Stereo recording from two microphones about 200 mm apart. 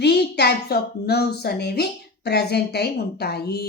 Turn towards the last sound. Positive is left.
turn(degrees=50)  # may be behind; listen again after turning